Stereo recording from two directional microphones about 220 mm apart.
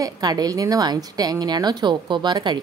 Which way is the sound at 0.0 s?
15° right (ahead or behind).